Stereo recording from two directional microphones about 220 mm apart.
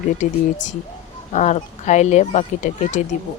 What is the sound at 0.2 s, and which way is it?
Speech, 35° left (ahead or behind).